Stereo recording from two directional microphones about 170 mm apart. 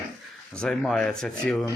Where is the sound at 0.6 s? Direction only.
Centre (ahead or behind).